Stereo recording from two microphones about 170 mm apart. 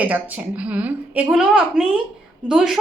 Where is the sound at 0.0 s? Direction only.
10° right (ahead or behind).